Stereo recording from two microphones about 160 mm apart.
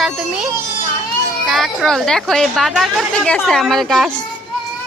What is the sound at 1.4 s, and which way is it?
A woman's voice, centre (ahead or behind).